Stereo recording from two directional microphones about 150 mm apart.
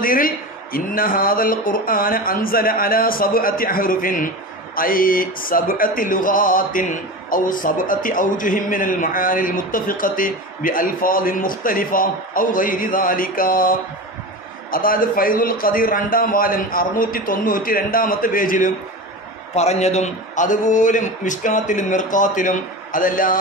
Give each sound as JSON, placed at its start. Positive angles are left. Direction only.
{"t": 0.0, "sound": "a man's voice", "side_deg": 70}
{"t": 0.7, "sound": "music", "side_deg": 70}
{"t": 19.5, "sound": "a man's voice", "side_deg": 45}